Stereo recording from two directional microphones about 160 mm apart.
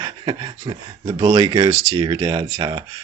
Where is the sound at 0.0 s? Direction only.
25° right (ahead or behind).